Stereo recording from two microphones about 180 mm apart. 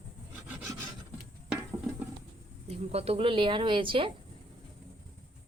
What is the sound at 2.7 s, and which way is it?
A woman's voice, 35° right (ahead or behind).